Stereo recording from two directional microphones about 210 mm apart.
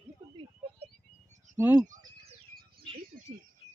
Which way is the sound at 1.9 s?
40° right (ahead or behind).